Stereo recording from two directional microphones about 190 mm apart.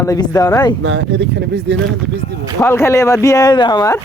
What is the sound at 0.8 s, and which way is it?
Speech, 80° right.